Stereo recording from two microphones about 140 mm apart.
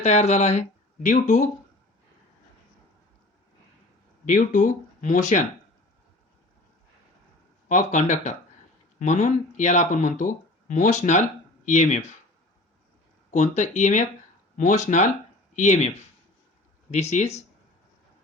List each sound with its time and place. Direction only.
0.0 s speech: 55° left (ahead or behind)
4.3 s speech: 65° left (ahead or behind)
7.7 s speech: 60° left (ahead or behind)
13.3 s speech: 55° left (ahead or behind)
16.9 s speech: 55° left (ahead or behind)